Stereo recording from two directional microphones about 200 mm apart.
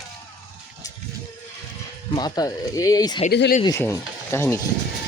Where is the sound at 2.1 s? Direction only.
20° left (ahead or behind).